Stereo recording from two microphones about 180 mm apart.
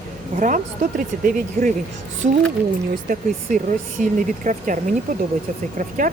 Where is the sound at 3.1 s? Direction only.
50° right (ahead or behind).